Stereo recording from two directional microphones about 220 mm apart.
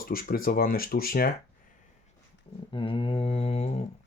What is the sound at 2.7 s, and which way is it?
Mantra, 25° left (ahead or behind).